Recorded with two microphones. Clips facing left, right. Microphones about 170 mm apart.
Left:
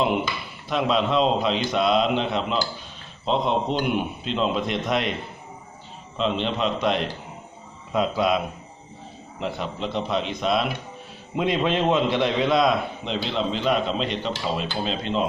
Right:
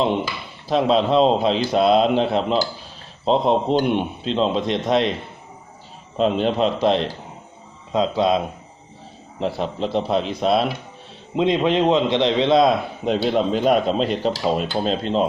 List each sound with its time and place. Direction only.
0.7 s a man's voice: 35° right (ahead or behind)
6.1 s a man's voice: 45° right (ahead or behind); by 8.4 s 25° right (ahead or behind)
9.4 s a man's voice: 35° right (ahead or behind)
11.3 s a man's voice: 20° right (ahead or behind)
13.1 s speech: 50° right (ahead or behind)